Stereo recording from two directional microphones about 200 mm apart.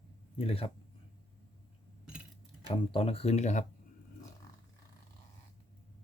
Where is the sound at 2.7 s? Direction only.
25° left (ahead or behind).